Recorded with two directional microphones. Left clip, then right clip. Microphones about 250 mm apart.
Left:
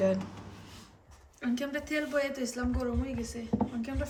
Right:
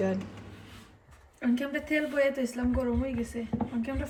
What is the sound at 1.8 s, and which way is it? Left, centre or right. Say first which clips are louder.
Speech: right 5 dB; right.